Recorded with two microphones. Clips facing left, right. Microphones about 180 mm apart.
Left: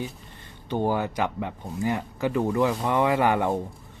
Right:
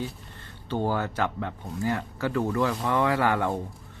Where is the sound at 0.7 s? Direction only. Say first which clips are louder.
Left 2 dB; 15° left (ahead or behind).